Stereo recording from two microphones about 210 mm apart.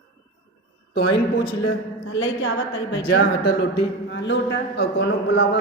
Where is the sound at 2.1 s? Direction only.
60° left (ahead or behind).